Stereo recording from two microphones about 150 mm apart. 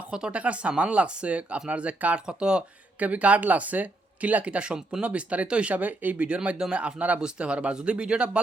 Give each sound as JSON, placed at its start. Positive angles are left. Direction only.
{"t": 0.1, "sound": "speech", "side_deg": -5}